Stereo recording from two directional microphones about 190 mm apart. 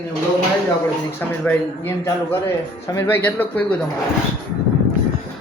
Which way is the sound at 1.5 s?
10° left (ahead or behind).